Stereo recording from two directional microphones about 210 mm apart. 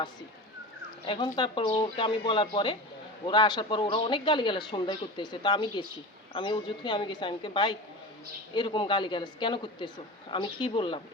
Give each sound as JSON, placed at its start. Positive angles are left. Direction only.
{"t": 1.0, "sound": "speech", "side_deg": 20}